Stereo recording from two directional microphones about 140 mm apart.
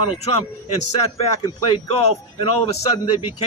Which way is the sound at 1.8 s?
45° left (ahead or behind).